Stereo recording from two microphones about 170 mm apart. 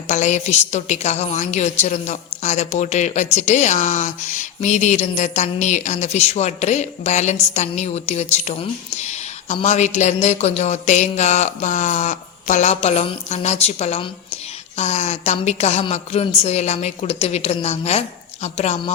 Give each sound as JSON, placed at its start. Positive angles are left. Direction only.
{"t": 0.1, "sound": "a woman's voice", "side_deg": 45}